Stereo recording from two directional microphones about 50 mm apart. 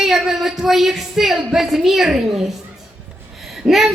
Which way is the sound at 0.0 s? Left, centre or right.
Centre.